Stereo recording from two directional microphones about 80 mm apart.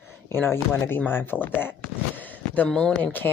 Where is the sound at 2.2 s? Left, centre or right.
Left.